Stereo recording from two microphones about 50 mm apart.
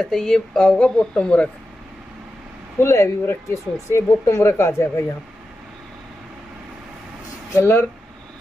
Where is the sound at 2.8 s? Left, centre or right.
Left.